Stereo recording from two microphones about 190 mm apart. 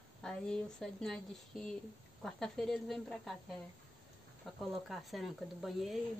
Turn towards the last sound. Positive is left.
turn(degrees=0)  # may be behind; listen again after turning